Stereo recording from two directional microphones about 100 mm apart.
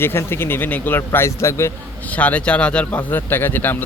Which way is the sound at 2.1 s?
15° left (ahead or behind).